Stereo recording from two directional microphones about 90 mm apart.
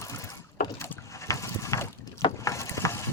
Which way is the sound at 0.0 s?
35° left (ahead or behind).